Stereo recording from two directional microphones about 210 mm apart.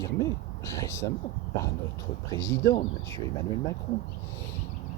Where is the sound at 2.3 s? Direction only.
15° left (ahead or behind).